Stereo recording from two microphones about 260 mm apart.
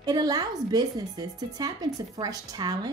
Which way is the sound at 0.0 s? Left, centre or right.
Centre.